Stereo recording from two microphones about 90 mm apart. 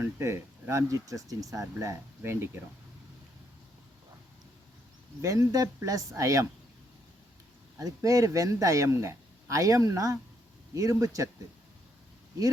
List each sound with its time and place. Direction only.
0.0 s speech: 25° right (ahead or behind)
5.2 s speech: 35° right (ahead or behind)
7.8 s speech: 40° right (ahead or behind)